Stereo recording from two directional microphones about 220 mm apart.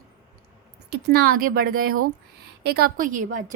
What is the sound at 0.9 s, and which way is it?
Speech, 45° right (ahead or behind).